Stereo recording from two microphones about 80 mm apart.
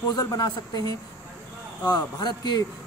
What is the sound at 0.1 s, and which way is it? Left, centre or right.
Speech, left.